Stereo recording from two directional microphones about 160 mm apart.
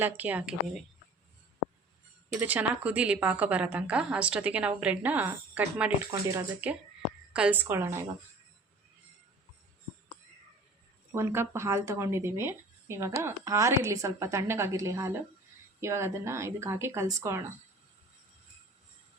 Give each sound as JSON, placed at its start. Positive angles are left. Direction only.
{"t": 0.0, "sound": "speech", "side_deg": -10}
{"t": 2.4, "sound": "speech", "side_deg": -10}
{"t": 11.1, "sound": "speech", "side_deg": -15}